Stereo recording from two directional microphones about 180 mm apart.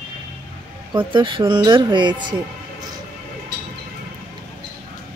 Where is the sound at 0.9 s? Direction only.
25° right (ahead or behind).